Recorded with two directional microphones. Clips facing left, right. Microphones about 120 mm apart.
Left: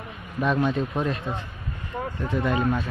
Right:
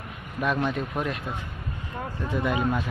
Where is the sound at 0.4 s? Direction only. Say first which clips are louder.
Left 3 dB; centre (ahead or behind).